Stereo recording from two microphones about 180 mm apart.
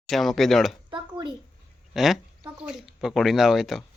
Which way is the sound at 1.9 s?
Centre (ahead or behind).